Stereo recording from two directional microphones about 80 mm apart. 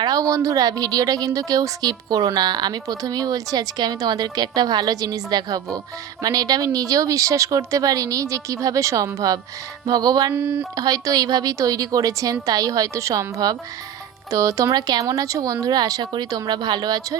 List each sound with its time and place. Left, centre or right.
0.0 s a woman's voice: right
9.8 s a woman's voice: right
10.3 s speech: right
10.8 s a woman's voice: right